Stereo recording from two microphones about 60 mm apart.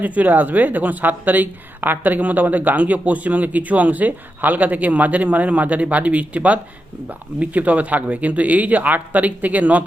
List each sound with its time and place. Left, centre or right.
0.0 s speech: right